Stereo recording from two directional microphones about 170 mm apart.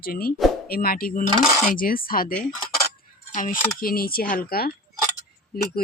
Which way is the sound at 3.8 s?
60° left (ahead or behind).